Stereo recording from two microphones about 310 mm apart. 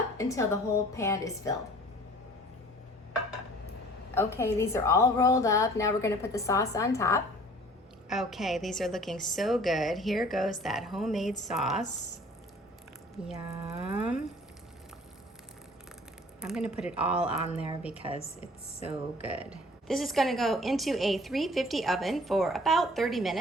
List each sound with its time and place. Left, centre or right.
0.2 s a woman's voice: centre
4.1 s a woman's voice: centre
8.1 s a woman's voice: centre
13.2 s a woman's voice: centre
16.4 s a woman's voice: centre
18.2 s speech: centre
18.9 s a woman's voice: centre